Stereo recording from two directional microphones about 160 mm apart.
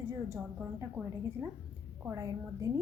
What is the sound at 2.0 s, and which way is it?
Speech, 25° right (ahead or behind).